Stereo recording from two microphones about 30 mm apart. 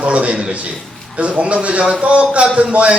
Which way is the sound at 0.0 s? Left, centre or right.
Right.